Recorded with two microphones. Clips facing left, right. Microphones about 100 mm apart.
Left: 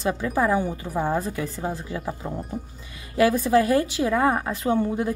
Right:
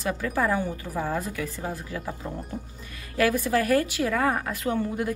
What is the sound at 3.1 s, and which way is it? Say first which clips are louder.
A woman's voice: left 4 dB; 25° left (ahead or behind).